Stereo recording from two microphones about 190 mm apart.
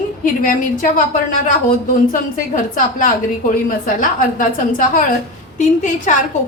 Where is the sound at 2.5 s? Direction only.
45° left (ahead or behind).